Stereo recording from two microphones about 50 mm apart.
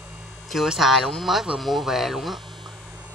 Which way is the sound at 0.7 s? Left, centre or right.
Centre.